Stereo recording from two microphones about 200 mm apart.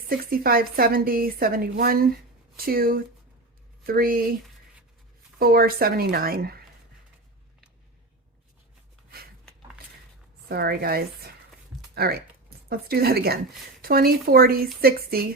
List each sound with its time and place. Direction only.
0.1 s a woman's voice: 45° right (ahead or behind)
5.4 s a woman's voice: 50° right (ahead or behind)
10.5 s a woman's voice: 50° right (ahead or behind)